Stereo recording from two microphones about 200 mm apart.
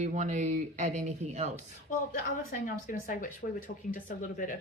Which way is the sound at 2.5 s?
45° left (ahead or behind).